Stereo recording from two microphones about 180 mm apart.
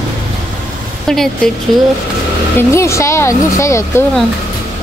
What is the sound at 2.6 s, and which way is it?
Speech, 15° left (ahead or behind).